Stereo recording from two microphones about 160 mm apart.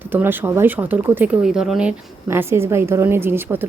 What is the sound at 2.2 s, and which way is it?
Speech, 15° right (ahead or behind).